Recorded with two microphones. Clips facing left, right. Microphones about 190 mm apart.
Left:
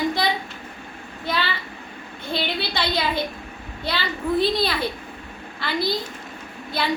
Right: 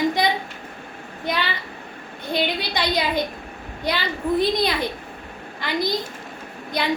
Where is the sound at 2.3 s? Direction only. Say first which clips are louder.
Right 2 dB; 15° right (ahead or behind).